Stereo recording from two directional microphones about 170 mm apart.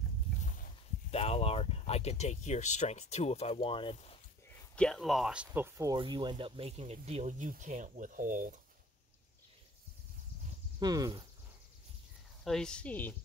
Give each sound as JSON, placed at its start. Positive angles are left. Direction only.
{"t": 1.1, "sound": "speech", "side_deg": 35}
{"t": 4.7, "sound": "speech", "side_deg": 0}
{"t": 10.8, "sound": "speech", "side_deg": -25}
{"t": 12.4, "sound": "speech", "side_deg": 5}